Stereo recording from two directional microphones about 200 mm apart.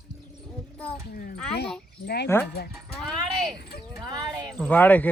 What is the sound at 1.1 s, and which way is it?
Speech, 45° left (ahead or behind).